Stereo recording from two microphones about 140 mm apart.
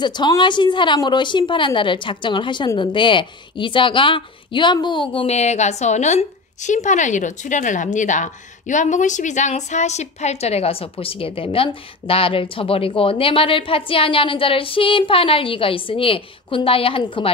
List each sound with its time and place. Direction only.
0.0 s a woman's voice: 30° left (ahead or behind)